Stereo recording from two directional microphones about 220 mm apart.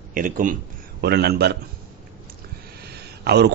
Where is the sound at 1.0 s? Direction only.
45° right (ahead or behind).